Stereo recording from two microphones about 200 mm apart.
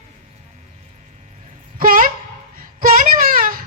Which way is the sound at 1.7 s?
45° right (ahead or behind).